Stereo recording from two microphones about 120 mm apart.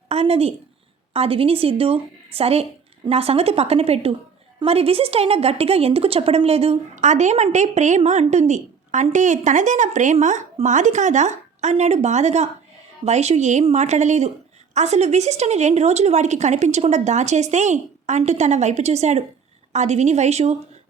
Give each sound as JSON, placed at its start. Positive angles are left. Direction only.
{"t": 0.1, "sound": "a woman's voice", "side_deg": -60}
{"t": 6.9, "sound": "a woman's voice", "side_deg": -85}